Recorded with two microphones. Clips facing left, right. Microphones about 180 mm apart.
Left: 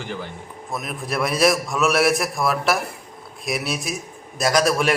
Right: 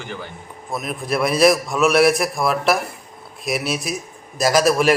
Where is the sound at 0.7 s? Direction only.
Centre (ahead or behind).